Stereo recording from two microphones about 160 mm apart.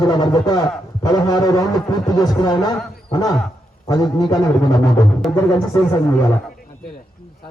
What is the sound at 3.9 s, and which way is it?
Speech, 20° left (ahead or behind).